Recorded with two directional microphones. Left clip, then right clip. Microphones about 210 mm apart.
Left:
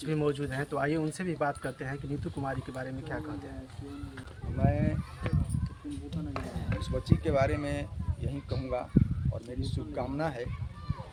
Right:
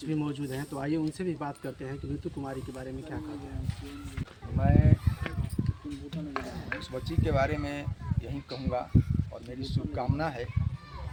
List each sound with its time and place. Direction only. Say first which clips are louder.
0.1 s speech: left 3 dB; 55° left (ahead or behind)
4.6 s honk: right 2 dB; 5° right (ahead or behind)
6.9 s speech: left 2 dB; 5° left (ahead or behind)